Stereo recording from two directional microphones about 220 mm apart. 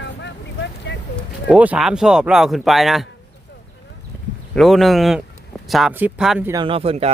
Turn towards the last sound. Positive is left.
turn(degrees=-25)  # may be behind; listen again after turning